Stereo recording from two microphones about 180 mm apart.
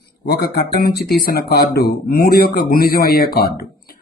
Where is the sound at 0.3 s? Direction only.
60° left (ahead or behind).